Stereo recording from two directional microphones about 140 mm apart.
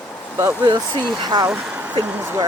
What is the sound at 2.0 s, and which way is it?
Speech, 15° right (ahead or behind).